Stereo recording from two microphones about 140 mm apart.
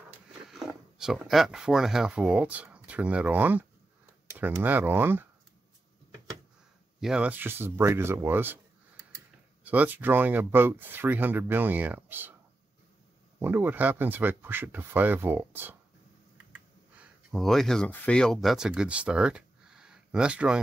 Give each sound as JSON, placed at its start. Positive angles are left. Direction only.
{"t": 0.5, "sound": "speech", "side_deg": -5}
{"t": 7.0, "sound": "speech", "side_deg": -5}
{"t": 9.7, "sound": "speech", "side_deg": -10}
{"t": 13.4, "sound": "speech", "side_deg": -15}
{"t": 17.3, "sound": "speech", "side_deg": 0}